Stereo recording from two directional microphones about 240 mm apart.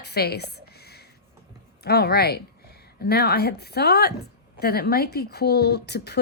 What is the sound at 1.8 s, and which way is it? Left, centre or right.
A woman's voice, left.